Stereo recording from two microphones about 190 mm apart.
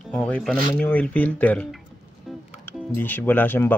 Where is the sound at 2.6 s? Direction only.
10° left (ahead or behind).